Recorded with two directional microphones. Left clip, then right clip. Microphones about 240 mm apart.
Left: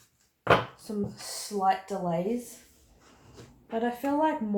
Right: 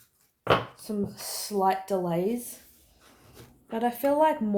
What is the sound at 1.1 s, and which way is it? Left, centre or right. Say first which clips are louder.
Speech: right 3 dB; right.